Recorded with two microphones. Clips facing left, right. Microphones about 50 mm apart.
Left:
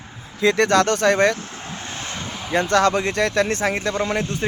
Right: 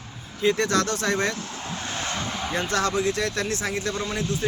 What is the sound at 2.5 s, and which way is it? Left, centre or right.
Speech, left.